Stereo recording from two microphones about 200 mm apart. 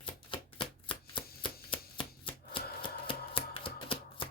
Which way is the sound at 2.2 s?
25° left (ahead or behind).